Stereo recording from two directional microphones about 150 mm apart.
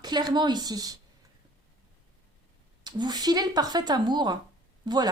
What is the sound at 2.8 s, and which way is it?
A woman's voice, 25° right (ahead or behind).